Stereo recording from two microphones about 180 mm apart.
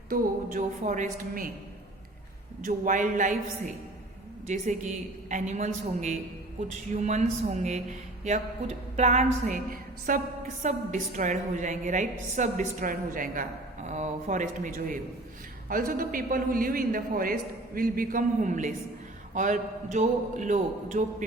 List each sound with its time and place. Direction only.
0.1 s a woman's voice: 45° right (ahead or behind)
2.6 s a woman's voice: 45° right (ahead or behind)
4.4 s a woman's voice: 40° right (ahead or behind)